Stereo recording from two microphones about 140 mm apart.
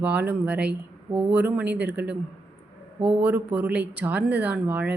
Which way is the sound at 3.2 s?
10° right (ahead or behind).